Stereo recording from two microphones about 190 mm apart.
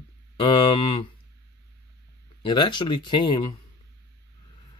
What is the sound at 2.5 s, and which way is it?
Speech, 25° left (ahead or behind).